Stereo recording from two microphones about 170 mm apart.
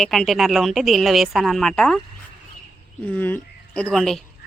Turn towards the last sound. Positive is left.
turn(degrees=0)  # may be behind; listen again after turning